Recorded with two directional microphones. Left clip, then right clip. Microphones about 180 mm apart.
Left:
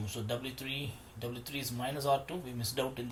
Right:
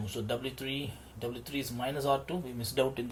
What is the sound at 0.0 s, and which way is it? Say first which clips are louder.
Speech: right 3 dB; 50° right (ahead or behind).